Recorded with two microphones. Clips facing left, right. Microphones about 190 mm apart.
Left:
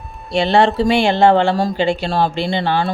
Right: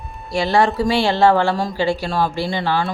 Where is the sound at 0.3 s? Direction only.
25° left (ahead or behind).